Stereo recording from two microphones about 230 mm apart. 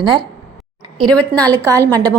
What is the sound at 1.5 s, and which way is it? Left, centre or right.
Speech, centre.